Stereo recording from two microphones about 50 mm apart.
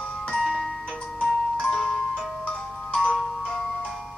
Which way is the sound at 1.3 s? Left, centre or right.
Centre.